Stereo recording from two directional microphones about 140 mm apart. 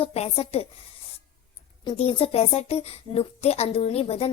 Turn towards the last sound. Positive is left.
turn(degrees=45)  # may be behind; listen again after turning